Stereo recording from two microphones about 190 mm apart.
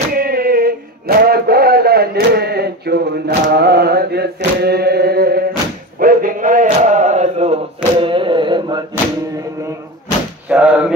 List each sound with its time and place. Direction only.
0.1 s a sound: 50° right (ahead or behind)
5.9 s mantra: 45° right (ahead or behind); by 8.8 s 25° right (ahead or behind)
10.5 s speech: 5° right (ahead or behind)